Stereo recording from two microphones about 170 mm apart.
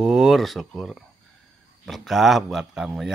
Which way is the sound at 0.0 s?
Centre (ahead or behind).